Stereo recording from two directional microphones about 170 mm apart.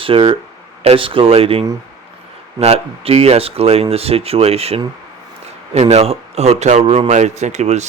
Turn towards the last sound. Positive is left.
turn(degrees=-40)  # may be behind; listen again after turning